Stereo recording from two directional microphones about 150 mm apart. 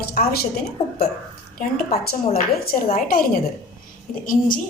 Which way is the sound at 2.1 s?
85° left.